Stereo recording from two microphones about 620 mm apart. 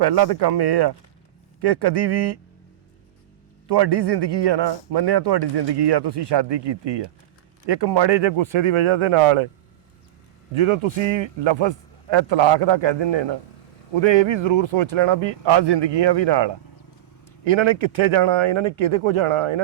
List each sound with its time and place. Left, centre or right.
0.0 s speech: right
3.7 s a man's voice: right
10.5 s a man's voice: right